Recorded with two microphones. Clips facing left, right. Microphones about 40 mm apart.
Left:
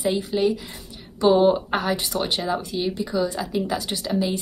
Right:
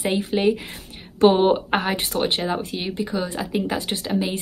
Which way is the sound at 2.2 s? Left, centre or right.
Right.